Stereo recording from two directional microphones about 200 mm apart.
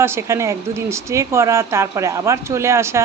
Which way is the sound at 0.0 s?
15° right (ahead or behind).